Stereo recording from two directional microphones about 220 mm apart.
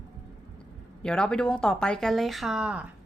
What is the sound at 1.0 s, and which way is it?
A woman's voice, 5° left (ahead or behind).